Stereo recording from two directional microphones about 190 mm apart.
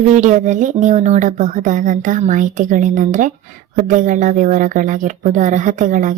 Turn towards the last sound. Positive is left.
turn(degrees=-45)  # may be behind; listen again after turning